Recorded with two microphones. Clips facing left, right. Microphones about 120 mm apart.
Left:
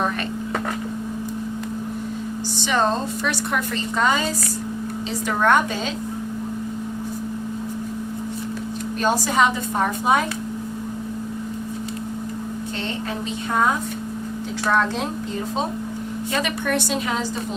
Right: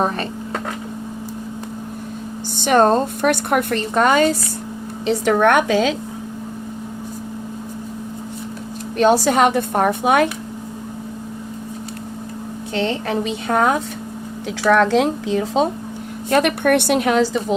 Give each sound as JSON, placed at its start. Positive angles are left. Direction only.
{"t": 2.6, "sound": "a woman's voice", "side_deg": -55}
{"t": 9.0, "sound": "a woman's voice", "side_deg": -70}
{"t": 13.5, "sound": "a woman's voice", "side_deg": -75}
{"t": 14.6, "sound": "speech", "side_deg": -85}
{"t": 16.3, "sound": "a woman's voice", "side_deg": -60}